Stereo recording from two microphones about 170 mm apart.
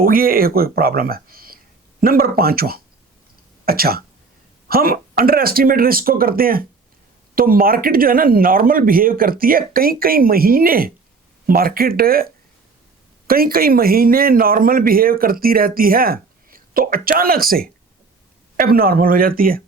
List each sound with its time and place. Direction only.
0.0 s a man's voice: 60° right (ahead or behind)